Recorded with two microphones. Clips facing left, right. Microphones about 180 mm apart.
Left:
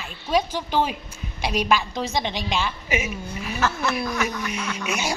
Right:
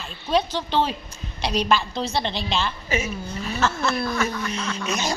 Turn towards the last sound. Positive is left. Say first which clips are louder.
# right 1 dB
turn(degrees=10)  # may be behind; listen again after turning